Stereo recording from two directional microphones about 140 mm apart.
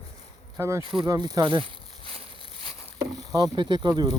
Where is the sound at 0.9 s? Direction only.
35° right (ahead or behind).